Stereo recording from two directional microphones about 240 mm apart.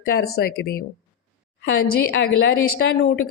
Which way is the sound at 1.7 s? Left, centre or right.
Left.